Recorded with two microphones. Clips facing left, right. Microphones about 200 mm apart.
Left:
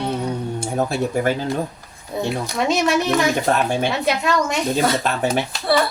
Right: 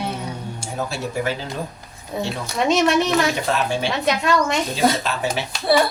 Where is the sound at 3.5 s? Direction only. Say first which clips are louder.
Left 3 dB; 55° left (ahead or behind).